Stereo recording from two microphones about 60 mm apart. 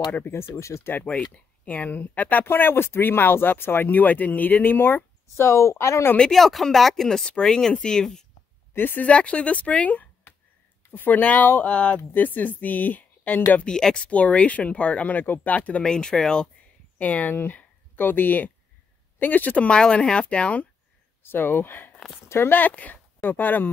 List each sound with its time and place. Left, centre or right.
0.2 s speech: left
0.5 s speech: left
1.0 s speech: centre
2.4 s speech: left
5.4 s speech: left
6.3 s speech: centre
8.7 s speech: left
13.7 s speech: centre
15.8 s speech: centre
17.0 s speech: left
21.2 s speech: left
22.6 s speech: left